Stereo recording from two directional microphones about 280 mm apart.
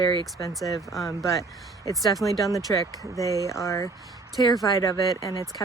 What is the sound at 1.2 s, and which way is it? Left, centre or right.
Speech, centre.